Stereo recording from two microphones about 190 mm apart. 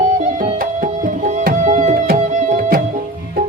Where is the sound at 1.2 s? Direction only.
40° right (ahead or behind).